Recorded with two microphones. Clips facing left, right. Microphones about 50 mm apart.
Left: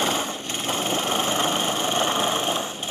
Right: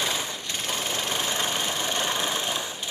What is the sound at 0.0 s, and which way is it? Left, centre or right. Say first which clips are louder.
Light engine: left 4 dB; left.